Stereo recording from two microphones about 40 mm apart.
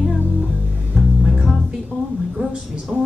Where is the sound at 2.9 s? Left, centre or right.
Right.